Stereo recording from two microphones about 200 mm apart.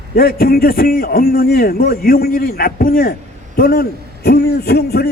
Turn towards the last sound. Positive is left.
turn(degrees=50)  # may be behind; listen again after turning